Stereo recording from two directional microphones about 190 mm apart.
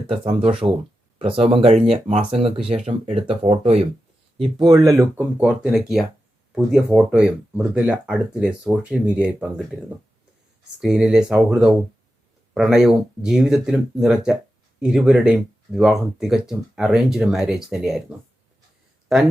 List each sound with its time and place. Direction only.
0.1 s speech: 30° right (ahead or behind)
5.1 s speech: 5° right (ahead or behind)
10.8 s speech: centre (ahead or behind)
19.1 s speech: centre (ahead or behind)